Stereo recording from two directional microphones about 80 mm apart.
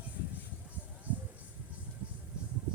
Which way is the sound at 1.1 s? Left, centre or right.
Centre.